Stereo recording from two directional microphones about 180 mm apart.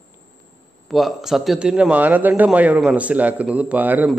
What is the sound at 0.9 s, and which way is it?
A man's voice, centre (ahead or behind).